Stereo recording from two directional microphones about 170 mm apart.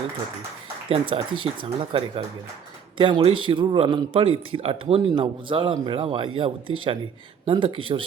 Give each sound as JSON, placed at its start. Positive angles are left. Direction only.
{"t": 0.9, "sound": "a man's voice", "side_deg": -30}